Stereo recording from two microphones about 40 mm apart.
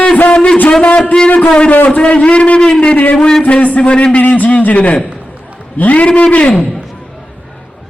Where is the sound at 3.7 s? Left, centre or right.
Left.